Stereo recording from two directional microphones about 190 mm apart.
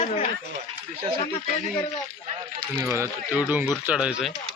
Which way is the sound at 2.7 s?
10° right (ahead or behind).